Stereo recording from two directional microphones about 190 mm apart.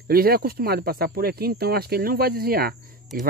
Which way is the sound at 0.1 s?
50° right (ahead or behind).